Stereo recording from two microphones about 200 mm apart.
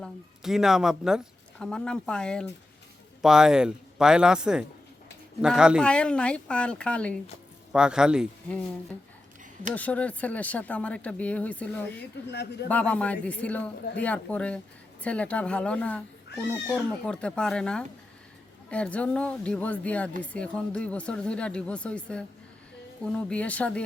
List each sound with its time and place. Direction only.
0.0 s speech: centre (ahead or behind)
9.7 s speech: 5° left (ahead or behind)
12.3 s a man's voice: 55° left (ahead or behind)
12.6 s speech: 5° left (ahead or behind)